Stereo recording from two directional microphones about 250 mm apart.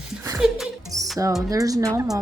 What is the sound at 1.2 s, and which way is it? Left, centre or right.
Speech, centre.